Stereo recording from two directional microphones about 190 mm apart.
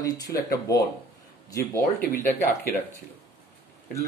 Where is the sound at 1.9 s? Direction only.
50° left (ahead or behind).